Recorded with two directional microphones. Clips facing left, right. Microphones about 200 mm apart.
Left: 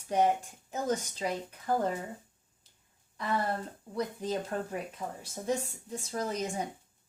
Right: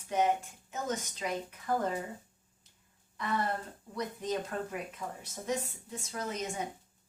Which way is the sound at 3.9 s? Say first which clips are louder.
Left 2 dB; 30° left (ahead or behind).